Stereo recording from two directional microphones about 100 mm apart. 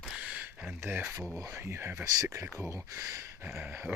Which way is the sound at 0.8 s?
20° right (ahead or behind).